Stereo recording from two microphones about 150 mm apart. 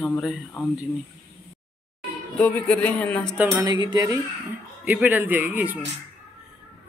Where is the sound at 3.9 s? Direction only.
20° right (ahead or behind).